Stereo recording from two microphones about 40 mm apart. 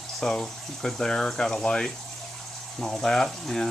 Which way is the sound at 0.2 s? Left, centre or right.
Centre.